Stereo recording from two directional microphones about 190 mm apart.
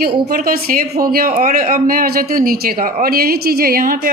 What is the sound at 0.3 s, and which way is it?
A man's voice, 55° right (ahead or behind).